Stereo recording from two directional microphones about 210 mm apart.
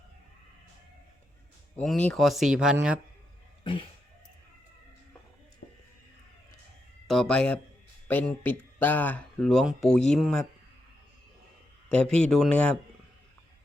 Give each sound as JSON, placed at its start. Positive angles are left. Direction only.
{"t": 1.7, "sound": "speech", "side_deg": 5}
{"t": 3.6, "sound": "speech", "side_deg": 25}
{"t": 5.6, "sound": "a sound", "side_deg": 45}
{"t": 7.1, "sound": "speech", "side_deg": 5}
{"t": 11.9, "sound": "speech", "side_deg": 5}